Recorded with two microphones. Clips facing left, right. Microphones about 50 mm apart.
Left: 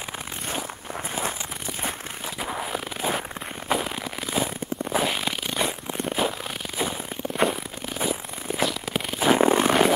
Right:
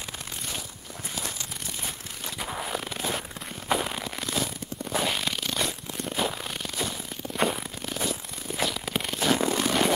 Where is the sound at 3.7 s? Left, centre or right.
Centre.